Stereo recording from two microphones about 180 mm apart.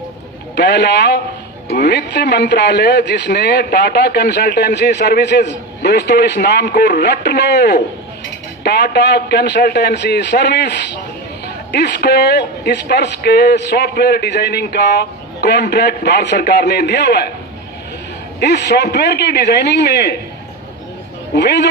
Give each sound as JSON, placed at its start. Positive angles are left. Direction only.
{"t": 0.5, "sound": "a man's voice", "side_deg": 70}
{"t": 18.3, "sound": "a man's voice", "side_deg": 70}
{"t": 21.3, "sound": "a man's voice", "side_deg": 70}